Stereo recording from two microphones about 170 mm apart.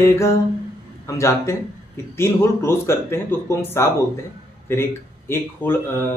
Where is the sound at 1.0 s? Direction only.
15° left (ahead or behind).